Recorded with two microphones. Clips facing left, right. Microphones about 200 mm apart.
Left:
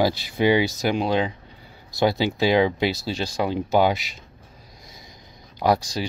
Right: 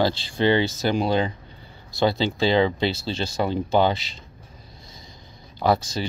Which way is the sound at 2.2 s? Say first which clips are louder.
Left 1 dB; 15° left (ahead or behind).